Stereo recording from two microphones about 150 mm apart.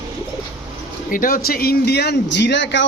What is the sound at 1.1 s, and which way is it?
Speech, 70° left (ahead or behind).